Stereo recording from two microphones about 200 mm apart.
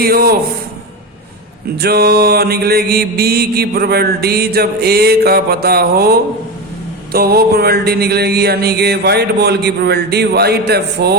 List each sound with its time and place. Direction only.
0.0 s mantra: 50° right (ahead or behind)
1.8 s mantra: 50° right (ahead or behind)